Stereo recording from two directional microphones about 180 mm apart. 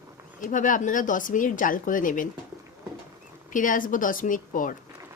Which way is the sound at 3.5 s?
45° left (ahead or behind).